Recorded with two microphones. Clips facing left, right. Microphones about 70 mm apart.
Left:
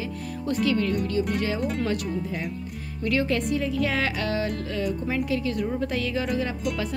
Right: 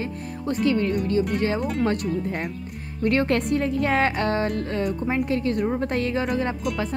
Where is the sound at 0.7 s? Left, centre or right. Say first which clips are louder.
Right 3 dB; right.